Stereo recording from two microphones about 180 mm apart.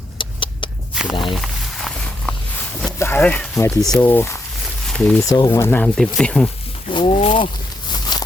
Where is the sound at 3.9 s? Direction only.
10° left (ahead or behind).